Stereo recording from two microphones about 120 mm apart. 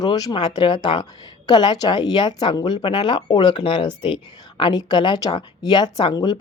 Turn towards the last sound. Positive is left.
turn(degrees=35)  # may be behind; listen again after turning